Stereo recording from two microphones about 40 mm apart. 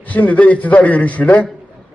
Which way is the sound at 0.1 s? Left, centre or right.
Left.